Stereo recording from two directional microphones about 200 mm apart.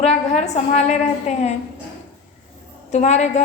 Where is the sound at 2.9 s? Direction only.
35° left (ahead or behind).